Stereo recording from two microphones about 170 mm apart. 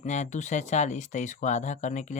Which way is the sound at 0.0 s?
45° left (ahead or behind).